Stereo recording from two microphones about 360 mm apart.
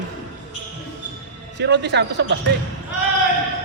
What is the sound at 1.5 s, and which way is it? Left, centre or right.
Speech, right.